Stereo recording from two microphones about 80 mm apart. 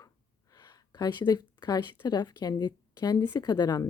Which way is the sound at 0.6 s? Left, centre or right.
Left.